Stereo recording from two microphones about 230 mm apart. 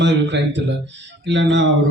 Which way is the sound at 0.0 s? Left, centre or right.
Right.